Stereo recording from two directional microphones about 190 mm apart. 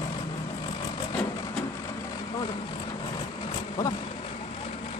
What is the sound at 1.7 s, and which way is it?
Vehicle, 20° left (ahead or behind).